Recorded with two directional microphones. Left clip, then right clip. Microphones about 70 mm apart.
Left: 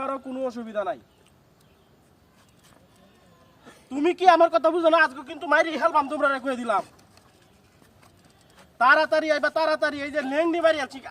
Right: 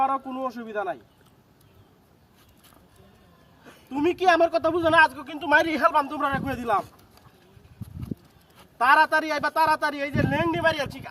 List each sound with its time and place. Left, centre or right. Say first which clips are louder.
0.0 s a man's voice: right 4 dB; left
3.7 s a man's voice: even; left
5.3 s speech: right 1 dB; right
5.6 s a man's voice: right 2 dB; centre
5.9 s a man's voice: left 2 dB; left
7.8 s a sound: right 11 dB; right
8.8 s a man's voice: even; left